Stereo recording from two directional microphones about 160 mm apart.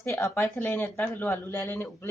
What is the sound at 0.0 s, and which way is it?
Speech, 15° left (ahead or behind).